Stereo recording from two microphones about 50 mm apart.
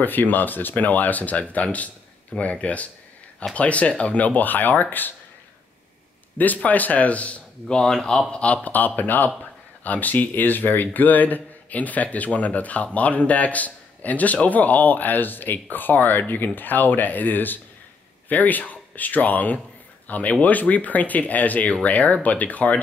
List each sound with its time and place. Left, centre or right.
0.0 s speech: left
6.3 s speech: left
7.7 s speech: centre
8.3 s speech: left
8.6 s speech: left